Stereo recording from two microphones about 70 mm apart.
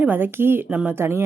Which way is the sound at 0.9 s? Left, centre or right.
Right.